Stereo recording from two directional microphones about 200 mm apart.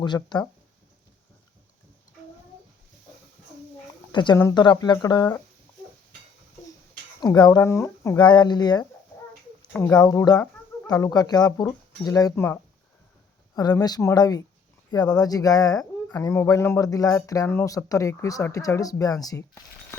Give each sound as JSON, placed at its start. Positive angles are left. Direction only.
{"t": 0.0, "sound": "speech", "side_deg": 20}
{"t": 4.1, "sound": "speech", "side_deg": 20}
{"t": 7.2, "sound": "speech", "side_deg": 20}
{"t": 13.6, "sound": "speech", "side_deg": 20}